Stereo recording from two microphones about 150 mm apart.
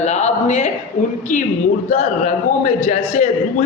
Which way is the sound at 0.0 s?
50° left (ahead or behind).